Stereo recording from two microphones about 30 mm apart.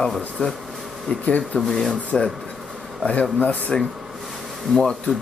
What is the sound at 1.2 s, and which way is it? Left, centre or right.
Speech, left.